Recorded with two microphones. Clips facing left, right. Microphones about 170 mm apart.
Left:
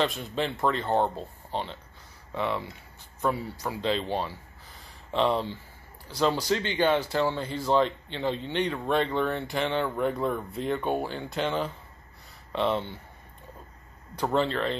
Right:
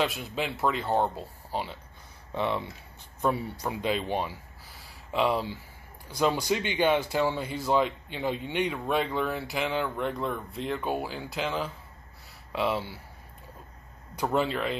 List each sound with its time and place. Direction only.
0.0 s speech: 5° right (ahead or behind)
2.3 s speech: 20° right (ahead or behind)
14.1 s speech: 10° right (ahead or behind)